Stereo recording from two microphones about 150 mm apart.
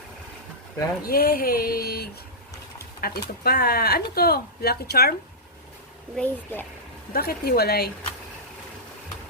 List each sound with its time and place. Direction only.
1.0 s a sound: 80° left
3.0 s speech: 90° left
6.1 s speech: 10° left (ahead or behind)
7.1 s speech: 90° left